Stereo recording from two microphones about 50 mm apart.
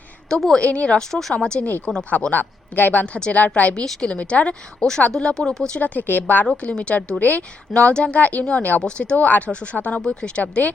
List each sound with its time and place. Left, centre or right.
0.3 s speech: centre
0.6 s speech: left
0.9 s speech: centre
2.0 s speech: left
3.1 s speech: centre
3.3 s speech: left
3.8 s speech: centre
5.8 s speech: left
6.6 s speech: left
7.2 s speech: left
7.7 s speech: left
8.8 s speech: left
9.1 s speech: left
10.4 s speech: left